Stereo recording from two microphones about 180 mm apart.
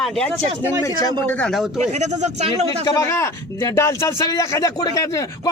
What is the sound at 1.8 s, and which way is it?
Speech, 40° right (ahead or behind).